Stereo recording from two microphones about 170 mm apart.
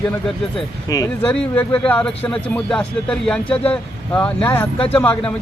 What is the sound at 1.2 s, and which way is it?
Speech, 10° left (ahead or behind).